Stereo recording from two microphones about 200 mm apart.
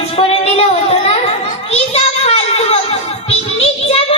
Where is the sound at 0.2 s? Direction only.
30° left (ahead or behind).